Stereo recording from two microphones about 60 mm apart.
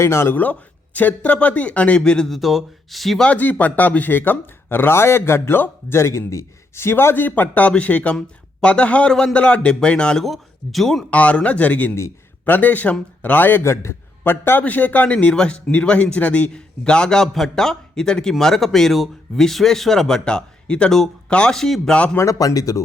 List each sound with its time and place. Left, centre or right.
0.0 s speech: left
0.9 s a man's voice: left
2.0 s speech: centre
2.3 s speech: centre
3.2 s a man's voice: left
10.2 s speech: centre
11.1 s a man's voice: left
13.6 s a man's voice: left
14.6 s speech: left; by 21.9 s centre
22.2 s speech: left